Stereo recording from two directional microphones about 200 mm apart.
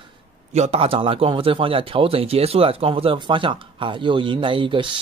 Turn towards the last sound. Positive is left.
turn(degrees=-25)  # may be behind; listen again after turning